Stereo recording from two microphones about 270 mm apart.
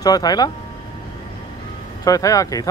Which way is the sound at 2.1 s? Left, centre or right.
Centre.